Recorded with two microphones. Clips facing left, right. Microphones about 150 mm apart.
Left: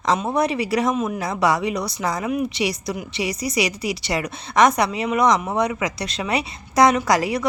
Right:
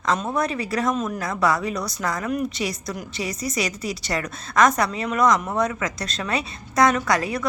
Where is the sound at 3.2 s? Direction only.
70° left (ahead or behind).